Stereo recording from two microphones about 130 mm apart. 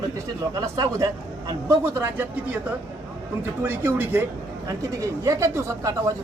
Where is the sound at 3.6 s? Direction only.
15° right (ahead or behind).